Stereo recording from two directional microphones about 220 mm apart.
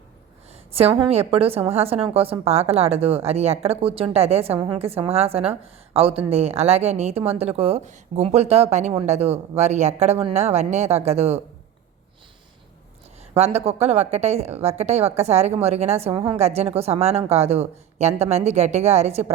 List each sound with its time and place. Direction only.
0.7 s a woman's voice: 25° right (ahead or behind)
13.3 s a woman's voice: 30° right (ahead or behind)